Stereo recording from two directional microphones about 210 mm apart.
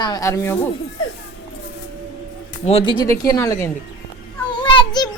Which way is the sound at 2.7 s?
25° left (ahead or behind).